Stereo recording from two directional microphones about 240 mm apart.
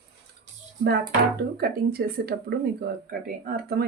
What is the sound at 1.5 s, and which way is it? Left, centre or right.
Speech, right.